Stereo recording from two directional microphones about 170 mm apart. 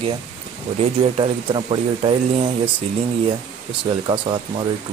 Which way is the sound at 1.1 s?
30° right (ahead or behind).